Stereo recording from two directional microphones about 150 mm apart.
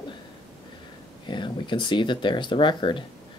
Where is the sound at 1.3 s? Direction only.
30° left (ahead or behind).